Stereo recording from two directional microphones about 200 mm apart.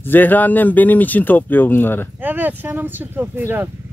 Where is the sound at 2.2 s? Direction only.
10° right (ahead or behind).